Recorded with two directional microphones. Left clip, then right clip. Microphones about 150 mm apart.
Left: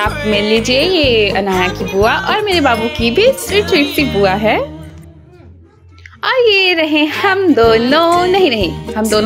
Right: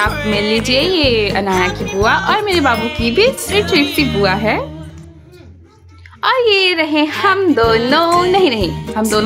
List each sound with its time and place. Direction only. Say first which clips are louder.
0.0 s speech: left 1 dB; centre (ahead or behind)
3.0 s a woman's voice: left 3 dB; 15° left (ahead or behind)
3.3 s speech: left 1 dB; centre (ahead or behind)
6.2 s a woman's voice: left 1 dB; 10° left (ahead or behind)
8.1 s speech: left 1 dB; centre (ahead or behind)